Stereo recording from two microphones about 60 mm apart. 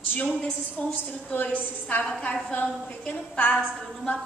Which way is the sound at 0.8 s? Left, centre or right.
Centre.